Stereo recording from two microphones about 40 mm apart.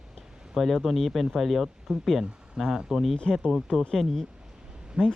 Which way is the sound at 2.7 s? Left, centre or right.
Centre.